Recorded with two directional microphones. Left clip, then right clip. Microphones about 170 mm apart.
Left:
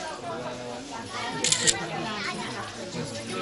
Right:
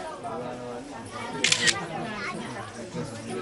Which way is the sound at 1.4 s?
55° right (ahead or behind).